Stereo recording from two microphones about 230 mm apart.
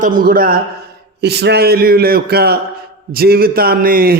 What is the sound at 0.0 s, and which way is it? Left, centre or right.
A man's voice, right.